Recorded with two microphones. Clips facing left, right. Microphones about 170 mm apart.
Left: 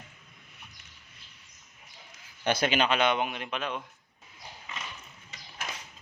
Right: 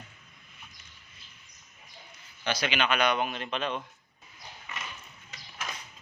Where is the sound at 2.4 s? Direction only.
50° left (ahead or behind).